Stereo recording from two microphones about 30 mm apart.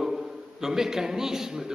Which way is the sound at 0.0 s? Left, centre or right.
Centre.